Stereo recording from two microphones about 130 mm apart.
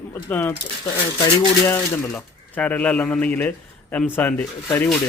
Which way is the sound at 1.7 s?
10° left (ahead or behind).